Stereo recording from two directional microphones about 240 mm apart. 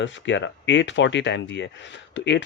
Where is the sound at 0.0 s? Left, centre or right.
Left.